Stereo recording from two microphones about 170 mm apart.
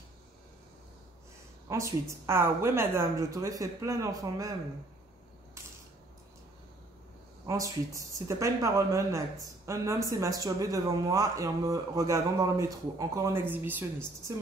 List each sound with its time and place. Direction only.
1.7 s a woman's voice: 15° right (ahead or behind)
7.4 s speech: 20° right (ahead or behind)